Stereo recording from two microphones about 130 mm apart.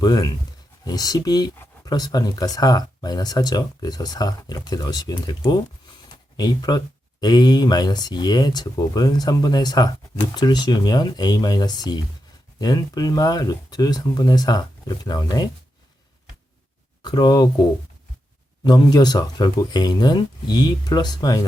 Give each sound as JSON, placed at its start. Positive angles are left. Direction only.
{"t": 0.0, "sound": "speech", "side_deg": 30}
{"t": 17.0, "sound": "speech", "side_deg": 35}